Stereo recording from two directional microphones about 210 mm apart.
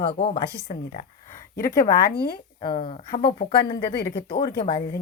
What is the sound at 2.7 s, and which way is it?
Speech, 25° left (ahead or behind).